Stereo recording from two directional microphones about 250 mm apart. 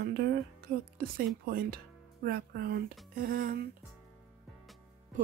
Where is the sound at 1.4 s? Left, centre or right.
Right.